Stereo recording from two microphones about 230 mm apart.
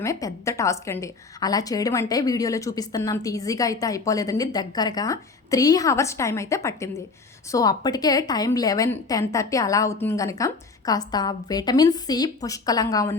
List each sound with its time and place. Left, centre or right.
0.0 s a woman's voice: centre